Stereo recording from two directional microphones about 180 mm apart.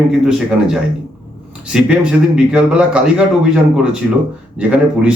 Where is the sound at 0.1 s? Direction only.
5° right (ahead or behind).